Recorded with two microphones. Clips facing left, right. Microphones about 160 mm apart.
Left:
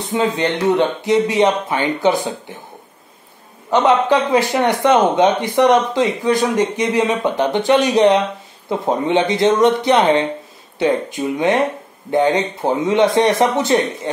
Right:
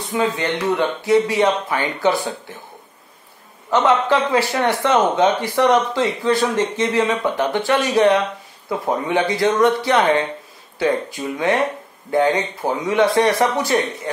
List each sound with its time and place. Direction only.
0.1 s speech: 20° left (ahead or behind)
3.7 s speech: 15° left (ahead or behind)